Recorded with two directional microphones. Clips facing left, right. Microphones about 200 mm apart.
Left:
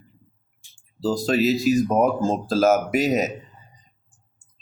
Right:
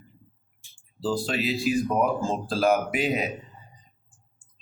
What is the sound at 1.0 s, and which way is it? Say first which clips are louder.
Speech: left 6 dB; 40° left (ahead or behind).